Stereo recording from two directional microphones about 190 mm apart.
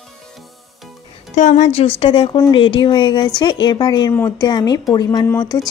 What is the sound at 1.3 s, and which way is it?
Speech, 40° left (ahead or behind).